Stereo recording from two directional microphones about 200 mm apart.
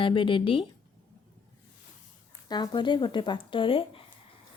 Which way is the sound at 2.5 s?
20° left (ahead or behind).